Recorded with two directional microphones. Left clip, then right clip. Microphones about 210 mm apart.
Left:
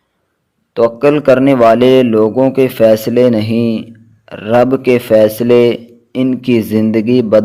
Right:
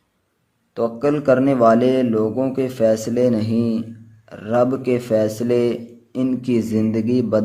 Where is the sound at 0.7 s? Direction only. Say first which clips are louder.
Left 10 dB; 35° left (ahead or behind).